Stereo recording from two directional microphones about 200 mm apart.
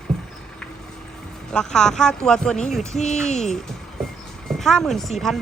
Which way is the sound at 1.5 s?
5° left (ahead or behind).